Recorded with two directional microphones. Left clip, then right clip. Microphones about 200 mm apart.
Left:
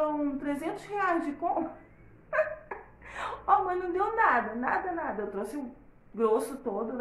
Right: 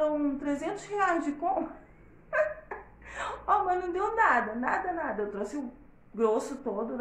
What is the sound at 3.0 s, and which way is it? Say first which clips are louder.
A woman's voice: right 1 dB; 10° left (ahead or behind).